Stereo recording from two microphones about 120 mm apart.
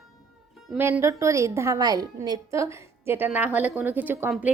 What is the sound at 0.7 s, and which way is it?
A woman's voice, 20° right (ahead or behind).